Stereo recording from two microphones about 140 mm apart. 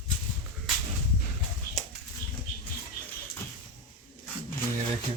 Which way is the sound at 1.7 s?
90° left.